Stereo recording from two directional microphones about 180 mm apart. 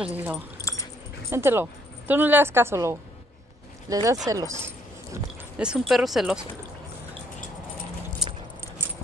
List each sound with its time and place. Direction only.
0.0 s a woman's voice: 10° right (ahead or behind)
0.6 s dog: 20° left (ahead or behind)
1.3 s a woman's voice: 15° right (ahead or behind)
4.6 s speech: 10° right (ahead or behind)